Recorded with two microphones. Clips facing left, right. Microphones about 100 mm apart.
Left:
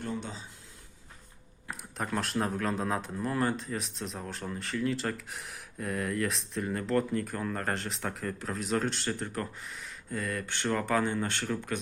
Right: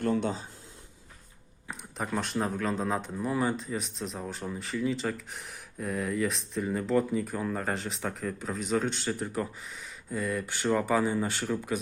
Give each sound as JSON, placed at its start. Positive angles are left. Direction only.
{"t": 0.0, "sound": "speech", "side_deg": -60}
{"t": 1.6, "sound": "speech", "side_deg": 0}